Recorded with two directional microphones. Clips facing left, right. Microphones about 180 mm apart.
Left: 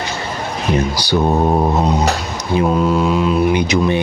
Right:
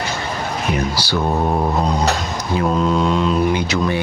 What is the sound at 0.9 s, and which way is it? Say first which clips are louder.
Speech: left 4 dB; 15° left (ahead or behind).